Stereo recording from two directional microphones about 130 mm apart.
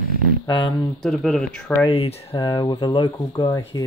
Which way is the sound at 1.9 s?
50° left (ahead or behind).